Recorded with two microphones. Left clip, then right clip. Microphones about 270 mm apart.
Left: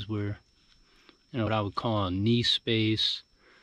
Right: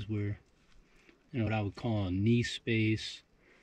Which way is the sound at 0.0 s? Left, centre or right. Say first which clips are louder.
Left 4 dB; centre.